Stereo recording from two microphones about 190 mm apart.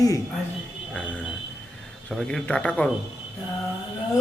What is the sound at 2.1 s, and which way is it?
Speech, 5° left (ahead or behind).